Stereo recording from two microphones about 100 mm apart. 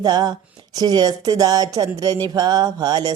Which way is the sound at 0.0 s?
45° right (ahead or behind).